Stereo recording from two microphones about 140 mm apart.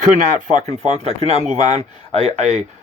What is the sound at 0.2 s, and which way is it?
Speech, 60° right (ahead or behind).